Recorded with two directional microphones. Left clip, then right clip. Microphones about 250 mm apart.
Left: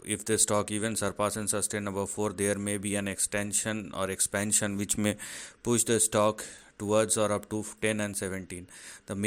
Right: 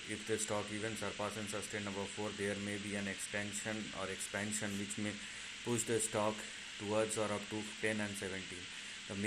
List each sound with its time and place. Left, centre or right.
0.4 s speech: left